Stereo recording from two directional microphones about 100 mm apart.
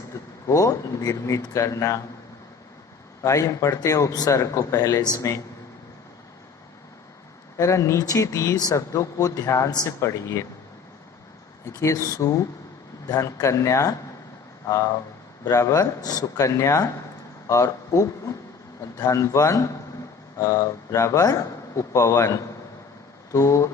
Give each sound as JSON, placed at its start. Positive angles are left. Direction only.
{"t": 0.1, "sound": "a sound", "side_deg": 30}
{"t": 1.5, "sound": "speech", "side_deg": 30}
{"t": 3.2, "sound": "speech", "side_deg": 30}
{"t": 7.5, "sound": "speech", "side_deg": 30}
{"t": 11.6, "sound": "speech", "side_deg": 30}